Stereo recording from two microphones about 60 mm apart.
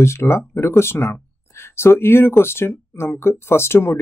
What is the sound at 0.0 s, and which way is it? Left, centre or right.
Speech, left.